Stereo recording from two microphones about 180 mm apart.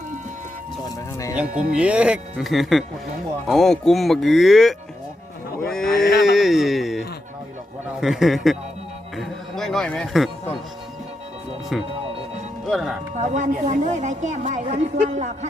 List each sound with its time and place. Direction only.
0.9 s music: 20° left (ahead or behind)
1.5 s speech: 50° right (ahead or behind)
1.7 s speech: 5° right (ahead or behind)
6.1 s a sound: centre (ahead or behind)
8.0 s speech: centre (ahead or behind)
9.1 s music: centre (ahead or behind)
11.7 s speech: centre (ahead or behind)
13.1 s a woman's voice: 40° right (ahead or behind)